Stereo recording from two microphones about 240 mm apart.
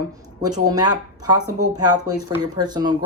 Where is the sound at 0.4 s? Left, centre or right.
Centre.